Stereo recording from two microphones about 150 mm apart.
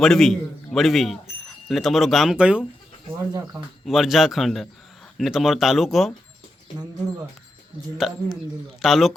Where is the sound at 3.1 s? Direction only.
20° right (ahead or behind).